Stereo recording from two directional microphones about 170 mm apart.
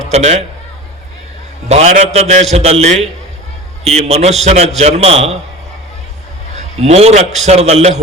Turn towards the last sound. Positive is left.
turn(degrees=-40)  # may be behind; listen again after turning